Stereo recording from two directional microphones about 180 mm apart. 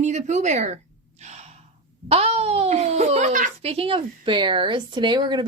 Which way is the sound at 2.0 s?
35° right (ahead or behind).